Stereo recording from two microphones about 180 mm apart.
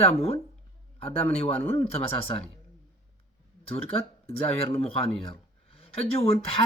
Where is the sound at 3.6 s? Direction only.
35° left (ahead or behind).